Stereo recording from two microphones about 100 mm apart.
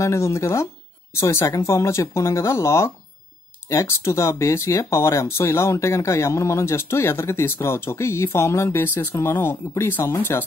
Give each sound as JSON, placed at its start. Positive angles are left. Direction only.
{"t": 0.0, "sound": "speech", "side_deg": 30}